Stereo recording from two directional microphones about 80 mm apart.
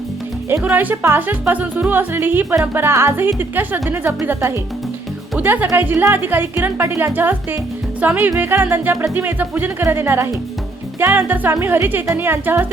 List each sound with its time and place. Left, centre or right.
0.5 s speech: right
5.4 s speech: right